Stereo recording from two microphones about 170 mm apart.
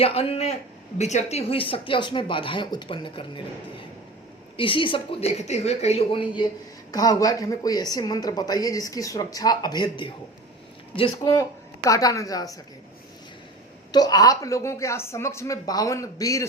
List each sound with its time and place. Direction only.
0.0 s a woman's voice: 35° left (ahead or behind)
4.5 s a woman's voice: 30° left (ahead or behind)
13.9 s speech: 20° left (ahead or behind)